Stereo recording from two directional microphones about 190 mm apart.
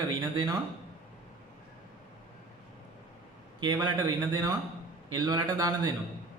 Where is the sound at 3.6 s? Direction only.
20° right (ahead or behind).